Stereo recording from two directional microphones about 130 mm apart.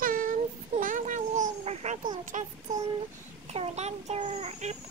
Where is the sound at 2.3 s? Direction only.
70° right (ahead or behind).